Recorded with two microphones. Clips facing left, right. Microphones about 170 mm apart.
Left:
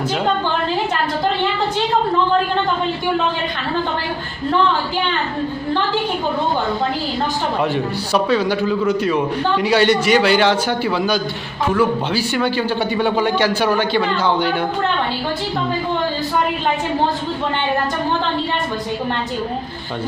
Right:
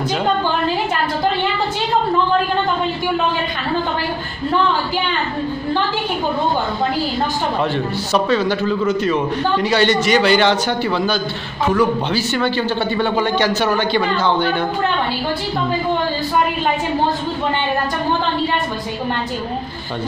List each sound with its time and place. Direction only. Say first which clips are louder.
7.7 s a man's voice: even; 10° left (ahead or behind)